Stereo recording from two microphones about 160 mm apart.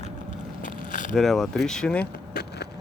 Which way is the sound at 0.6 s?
55° left (ahead or behind).